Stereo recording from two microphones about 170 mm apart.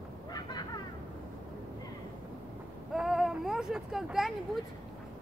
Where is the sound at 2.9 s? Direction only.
Centre (ahead or behind).